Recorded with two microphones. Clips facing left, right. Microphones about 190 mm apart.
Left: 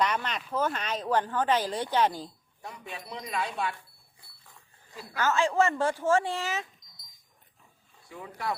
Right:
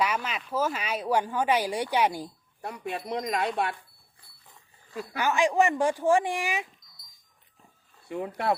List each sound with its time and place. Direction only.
0.0 s speech: 5° right (ahead or behind)
2.6 s speech: 60° right (ahead or behind)
5.1 s speech: 15° right (ahead or behind)
8.0 s speech: 60° right (ahead or behind)